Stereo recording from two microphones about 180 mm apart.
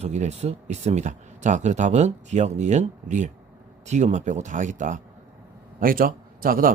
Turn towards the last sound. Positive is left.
turn(degrees=-50)  # may be behind; listen again after turning